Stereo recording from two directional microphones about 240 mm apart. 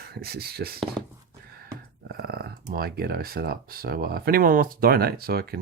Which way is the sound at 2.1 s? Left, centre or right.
Right.